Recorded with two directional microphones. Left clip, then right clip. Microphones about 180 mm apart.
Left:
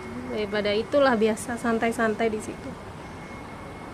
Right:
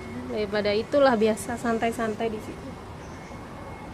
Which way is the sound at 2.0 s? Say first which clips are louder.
Left 4 dB; 20° left (ahead or behind).